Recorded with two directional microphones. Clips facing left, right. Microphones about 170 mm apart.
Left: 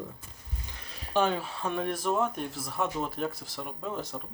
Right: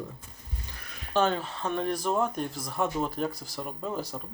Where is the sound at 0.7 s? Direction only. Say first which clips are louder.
Even; 25° left (ahead or behind).